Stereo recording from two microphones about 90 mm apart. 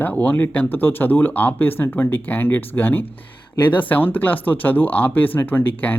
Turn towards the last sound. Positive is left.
turn(degrees=20)  # may be behind; listen again after turning